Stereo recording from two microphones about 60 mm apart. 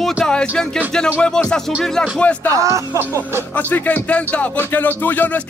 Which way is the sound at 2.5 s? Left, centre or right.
Right.